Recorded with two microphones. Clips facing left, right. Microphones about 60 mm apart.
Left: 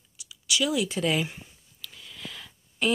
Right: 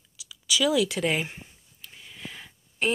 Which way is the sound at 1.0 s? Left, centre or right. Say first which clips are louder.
Even; right.